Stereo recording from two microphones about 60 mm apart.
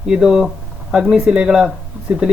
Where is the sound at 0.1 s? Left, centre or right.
Centre.